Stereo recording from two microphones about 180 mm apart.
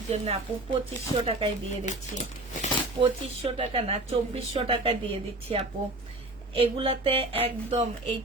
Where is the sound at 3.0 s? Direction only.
30° right (ahead or behind).